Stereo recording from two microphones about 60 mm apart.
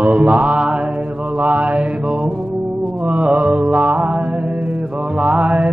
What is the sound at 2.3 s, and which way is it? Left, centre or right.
Music, right.